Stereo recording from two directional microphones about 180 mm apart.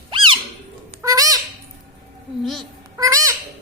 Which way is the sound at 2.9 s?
20° right (ahead or behind).